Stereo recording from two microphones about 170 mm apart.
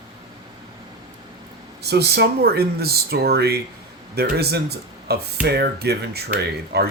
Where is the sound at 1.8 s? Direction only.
75° right (ahead or behind).